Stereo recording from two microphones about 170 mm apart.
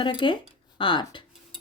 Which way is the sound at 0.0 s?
30° left (ahead or behind).